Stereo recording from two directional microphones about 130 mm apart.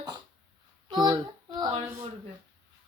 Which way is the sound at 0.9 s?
35° right (ahead or behind).